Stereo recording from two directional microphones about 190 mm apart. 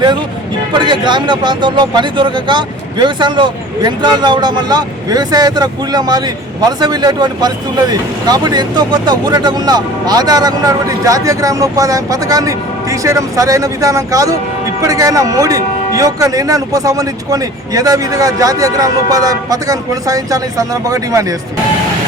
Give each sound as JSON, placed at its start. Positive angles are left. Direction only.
{"t": 0.7, "sound": "a man's voice", "side_deg": -25}